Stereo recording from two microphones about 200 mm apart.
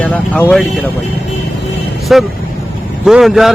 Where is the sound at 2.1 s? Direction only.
Centre (ahead or behind).